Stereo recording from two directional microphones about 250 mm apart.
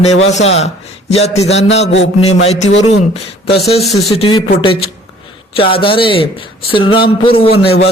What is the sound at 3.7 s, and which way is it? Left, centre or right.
A man's voice, left.